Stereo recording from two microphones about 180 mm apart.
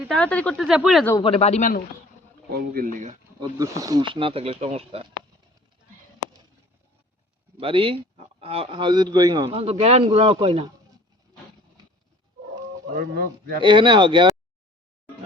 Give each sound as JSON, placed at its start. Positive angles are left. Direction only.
{"t": 0.0, "sound": "speech", "side_deg": 5}
{"t": 1.2, "sound": "speech", "side_deg": 35}
{"t": 2.5, "sound": "speech", "side_deg": -50}
{"t": 3.6, "sound": "speech", "side_deg": -20}
{"t": 7.6, "sound": "a man's voice", "side_deg": -30}
{"t": 9.5, "sound": "speech", "side_deg": -35}
{"t": 13.6, "sound": "a man's voice", "side_deg": -25}